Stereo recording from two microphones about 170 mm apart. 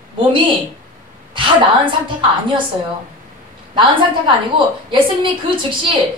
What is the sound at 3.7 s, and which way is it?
Speech, 30° right (ahead or behind).